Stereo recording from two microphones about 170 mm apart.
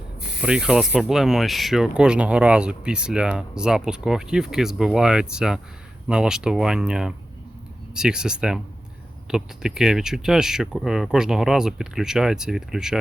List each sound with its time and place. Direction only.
0.4 s speech: 5° right (ahead or behind)